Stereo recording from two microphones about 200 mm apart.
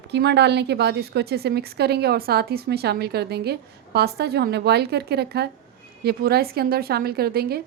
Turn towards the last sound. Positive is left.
turn(degrees=-50)  # may be behind; listen again after turning